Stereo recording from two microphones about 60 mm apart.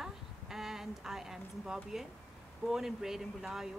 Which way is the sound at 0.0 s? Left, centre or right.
Centre.